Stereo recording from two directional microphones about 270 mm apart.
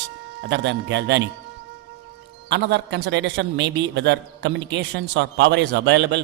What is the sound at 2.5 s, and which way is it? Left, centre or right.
A man's voice, right.